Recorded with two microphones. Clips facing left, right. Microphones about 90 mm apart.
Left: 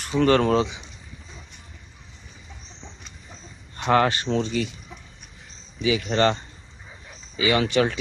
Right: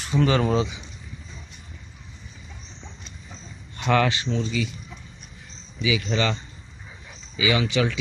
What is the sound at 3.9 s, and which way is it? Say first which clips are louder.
Speech: left 2 dB; 35° left (ahead or behind).